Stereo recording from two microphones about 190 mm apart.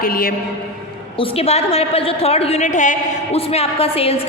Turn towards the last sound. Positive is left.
turn(degrees=30)  # may be behind; listen again after turning